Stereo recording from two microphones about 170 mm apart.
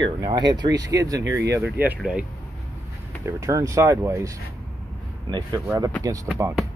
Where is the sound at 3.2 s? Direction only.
20° right (ahead or behind).